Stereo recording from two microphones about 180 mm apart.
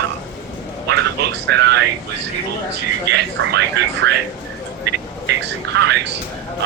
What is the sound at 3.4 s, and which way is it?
Speech, 90° right.